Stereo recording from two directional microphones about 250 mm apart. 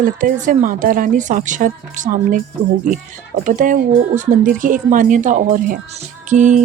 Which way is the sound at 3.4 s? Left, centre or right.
Right.